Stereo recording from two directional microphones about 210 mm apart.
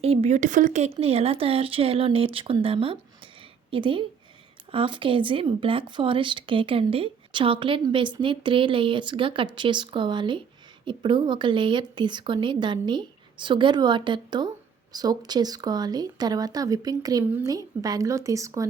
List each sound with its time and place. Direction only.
0.0 s speech: 30° right (ahead or behind)